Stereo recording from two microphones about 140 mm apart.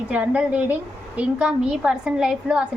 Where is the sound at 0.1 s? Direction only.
10° right (ahead or behind).